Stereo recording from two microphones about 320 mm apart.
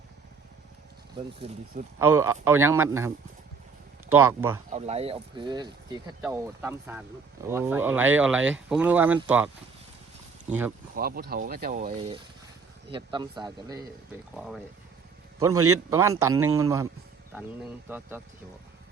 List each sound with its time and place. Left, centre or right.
1.4 s speech: centre
2.0 s speech: centre
4.1 s speech: centre
4.7 s speech: centre
10.9 s speech: right
11.9 s speech: centre
14.3 s speech: centre